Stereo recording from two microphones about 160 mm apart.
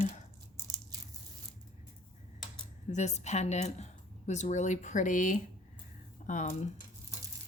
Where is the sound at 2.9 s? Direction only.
45° left (ahead or behind).